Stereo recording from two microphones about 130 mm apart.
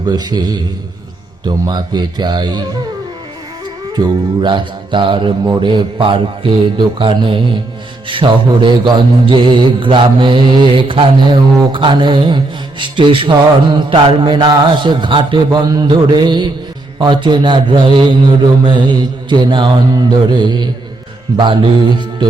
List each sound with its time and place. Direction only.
0.0 s mantra: 30° right (ahead or behind)
3.9 s mantra: 35° right (ahead or behind)